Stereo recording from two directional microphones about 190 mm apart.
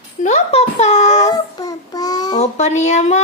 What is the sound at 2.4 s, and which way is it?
Speech, 35° left (ahead or behind).